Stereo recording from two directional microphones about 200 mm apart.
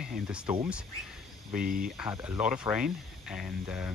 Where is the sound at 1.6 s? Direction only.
45° right (ahead or behind).